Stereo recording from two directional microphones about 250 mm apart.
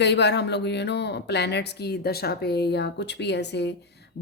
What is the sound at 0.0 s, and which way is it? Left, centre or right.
A woman's voice, left.